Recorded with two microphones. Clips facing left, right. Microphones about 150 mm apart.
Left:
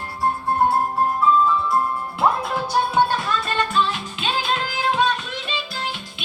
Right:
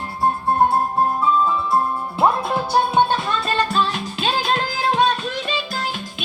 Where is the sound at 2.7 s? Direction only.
30° right (ahead or behind).